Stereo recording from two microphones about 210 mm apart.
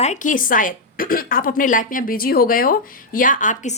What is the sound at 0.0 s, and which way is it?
A woman's voice, 35° left (ahead or behind).